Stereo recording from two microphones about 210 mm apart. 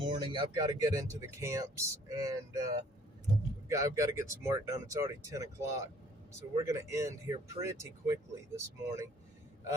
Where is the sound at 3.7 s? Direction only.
15° right (ahead or behind).